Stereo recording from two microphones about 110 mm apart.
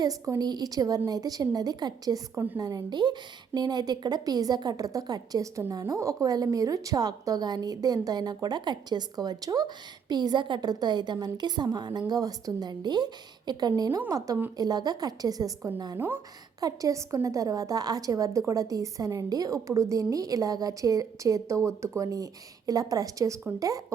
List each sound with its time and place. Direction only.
0.0 s a woman's voice: 35° right (ahead or behind)
2.3 s a woman's voice: 20° right (ahead or behind)
2.6 s a woman's voice: 35° right (ahead or behind)
16.0 s a woman's voice: 20° right (ahead or behind)
16.6 s a woman's voice: 30° right (ahead or behind)